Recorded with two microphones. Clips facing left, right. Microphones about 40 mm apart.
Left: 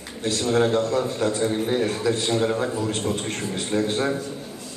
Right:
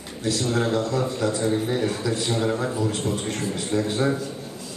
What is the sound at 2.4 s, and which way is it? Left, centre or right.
Speech, centre.